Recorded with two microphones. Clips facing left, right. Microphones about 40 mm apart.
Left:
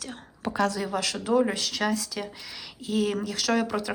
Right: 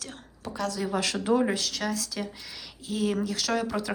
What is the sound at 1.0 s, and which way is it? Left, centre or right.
Speech, right.